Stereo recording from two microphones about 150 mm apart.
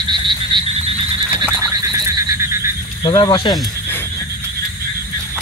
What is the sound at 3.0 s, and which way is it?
Speech, 30° left (ahead or behind).